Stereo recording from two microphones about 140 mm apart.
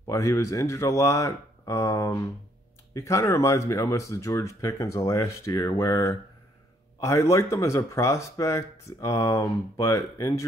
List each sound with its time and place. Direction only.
0.0 s speech: 25° left (ahead or behind)